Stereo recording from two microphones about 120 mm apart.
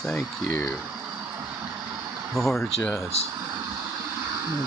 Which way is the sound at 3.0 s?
25° right (ahead or behind).